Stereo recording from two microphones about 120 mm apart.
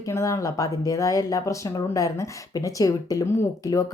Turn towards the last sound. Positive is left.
turn(degrees=25)  # may be behind; listen again after turning